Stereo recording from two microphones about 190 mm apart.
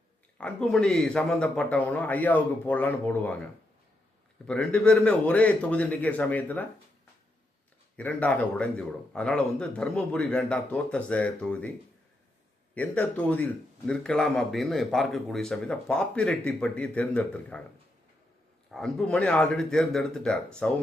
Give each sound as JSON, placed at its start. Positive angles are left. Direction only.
{"t": 0.3, "sound": "a man's voice", "side_deg": 5}
{"t": 4.4, "sound": "a man's voice", "side_deg": 5}
{"t": 7.9, "sound": "a man's voice", "side_deg": 10}
{"t": 12.7, "sound": "speech", "side_deg": 10}
{"t": 18.7, "sound": "speech", "side_deg": 0}